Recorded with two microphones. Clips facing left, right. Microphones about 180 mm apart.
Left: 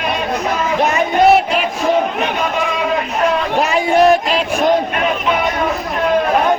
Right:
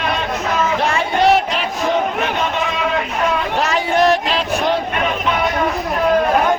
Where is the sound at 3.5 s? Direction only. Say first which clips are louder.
Left 4 dB; 10° left (ahead or behind).